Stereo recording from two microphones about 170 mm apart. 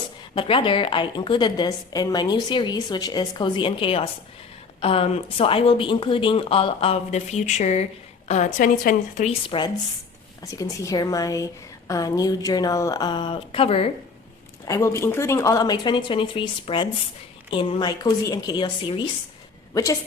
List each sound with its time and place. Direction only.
0.3 s a woman's voice: 30° left (ahead or behind); by 9.3 s 50° left (ahead or behind)
9.5 s a woman's voice: 25° left (ahead or behind)
14.6 s a woman's voice: 20° left (ahead or behind)